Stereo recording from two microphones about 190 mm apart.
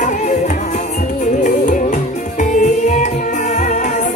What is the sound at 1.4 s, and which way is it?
Music, 40° left (ahead or behind).